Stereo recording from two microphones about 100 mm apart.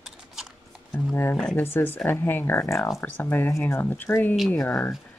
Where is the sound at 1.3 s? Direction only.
10° left (ahead or behind).